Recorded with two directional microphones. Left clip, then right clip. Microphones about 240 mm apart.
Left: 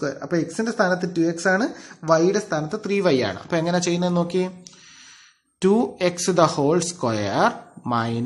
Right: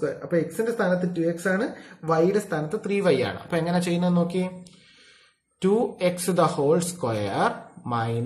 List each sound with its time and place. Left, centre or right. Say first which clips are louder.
0.0 s speech: left 1 dB; left
5.6 s speech: left 3 dB; left